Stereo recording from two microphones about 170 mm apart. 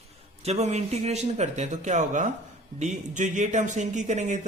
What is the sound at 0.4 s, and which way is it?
Speech, 40° right (ahead or behind).